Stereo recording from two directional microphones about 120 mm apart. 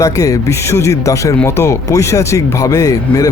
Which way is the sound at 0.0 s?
25° left (ahead or behind).